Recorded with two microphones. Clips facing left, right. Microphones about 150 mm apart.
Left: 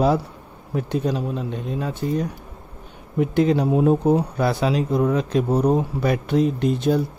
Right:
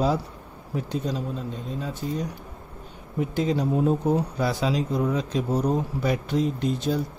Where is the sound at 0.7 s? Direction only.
60° left (ahead or behind).